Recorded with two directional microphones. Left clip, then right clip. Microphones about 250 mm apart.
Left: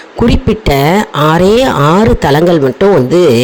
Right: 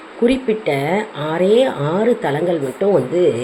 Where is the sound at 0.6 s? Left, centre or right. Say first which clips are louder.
Left 8 dB; left.